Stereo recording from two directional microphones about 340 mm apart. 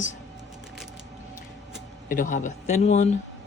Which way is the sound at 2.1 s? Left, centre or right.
Left.